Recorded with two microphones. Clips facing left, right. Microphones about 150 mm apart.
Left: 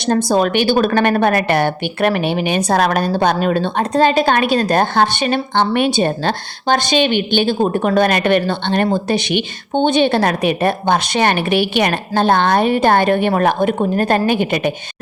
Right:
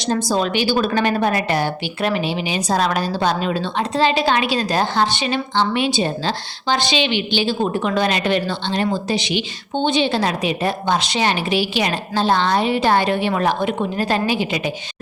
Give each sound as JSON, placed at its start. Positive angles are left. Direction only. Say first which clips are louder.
{"t": 0.0, "sound": "a woman's voice", "louder": "left 5 dB", "side_deg": 55}